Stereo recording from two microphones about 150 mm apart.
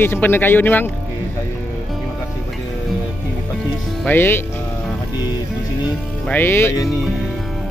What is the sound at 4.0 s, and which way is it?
Speech, 15° left (ahead or behind).